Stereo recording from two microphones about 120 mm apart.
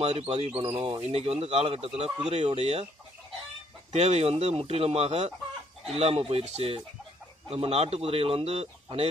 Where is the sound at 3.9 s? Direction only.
60° right (ahead or behind).